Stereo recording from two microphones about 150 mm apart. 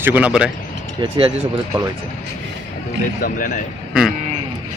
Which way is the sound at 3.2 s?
70° left (ahead or behind).